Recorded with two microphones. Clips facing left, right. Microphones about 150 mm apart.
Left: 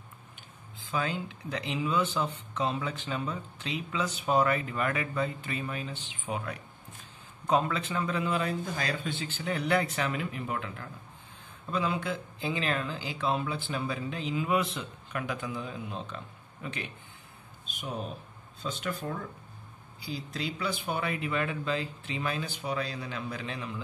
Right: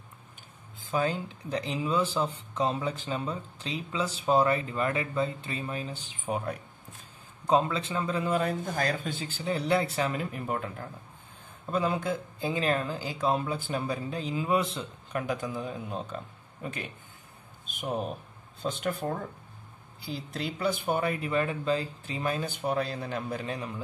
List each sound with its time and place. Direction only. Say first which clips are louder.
0.7 s speech: right 3 dB; 45° right (ahead or behind)
7.4 s speech: right 2 dB; 30° right (ahead or behind); by 23.7 s 45° right (ahead or behind)